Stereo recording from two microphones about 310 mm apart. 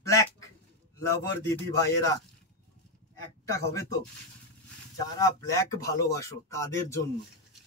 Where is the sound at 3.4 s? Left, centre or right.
Centre.